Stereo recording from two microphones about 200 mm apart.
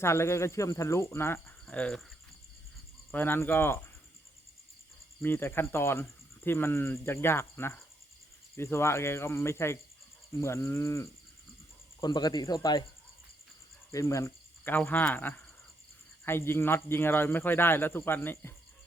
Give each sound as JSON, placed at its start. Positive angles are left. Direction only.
{"t": 0.0, "sound": "speech", "side_deg": 15}
{"t": 3.1, "sound": "speech", "side_deg": 10}
{"t": 5.2, "sound": "speech", "side_deg": 10}
{"t": 13.9, "sound": "speech", "side_deg": 15}